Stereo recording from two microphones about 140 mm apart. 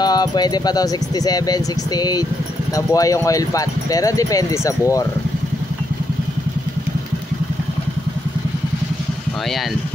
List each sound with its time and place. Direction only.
0.0 s speech: 30° left (ahead or behind)